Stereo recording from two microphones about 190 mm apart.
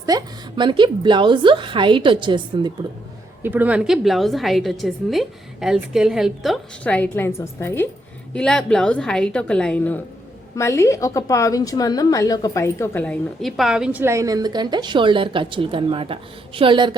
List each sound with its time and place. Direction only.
0.0 s a woman's voice: 20° right (ahead or behind)
3.4 s a woman's voice: 10° right (ahead or behind); by 16.9 s 25° right (ahead or behind)